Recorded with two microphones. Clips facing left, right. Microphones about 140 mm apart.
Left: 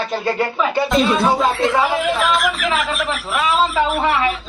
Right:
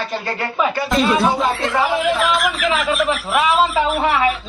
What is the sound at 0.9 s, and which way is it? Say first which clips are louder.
A man's voice: even; centre (ahead or behind).